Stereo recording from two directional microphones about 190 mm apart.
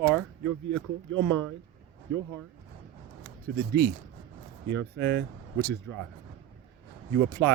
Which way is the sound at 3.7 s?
55° right (ahead or behind).